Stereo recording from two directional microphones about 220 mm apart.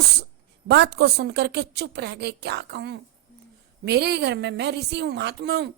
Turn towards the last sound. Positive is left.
turn(degrees=-50)  # may be behind; listen again after turning